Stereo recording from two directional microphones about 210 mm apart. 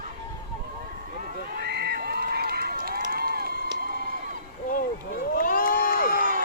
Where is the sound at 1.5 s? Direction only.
50° right (ahead or behind).